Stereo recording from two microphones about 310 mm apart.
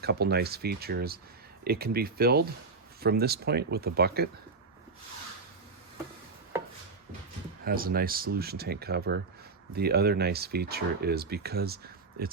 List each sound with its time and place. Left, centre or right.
0.0 s speech: right
7.6 s speech: right